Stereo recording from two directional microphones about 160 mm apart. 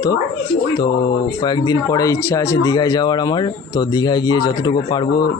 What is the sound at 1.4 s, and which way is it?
Speech, 25° left (ahead or behind).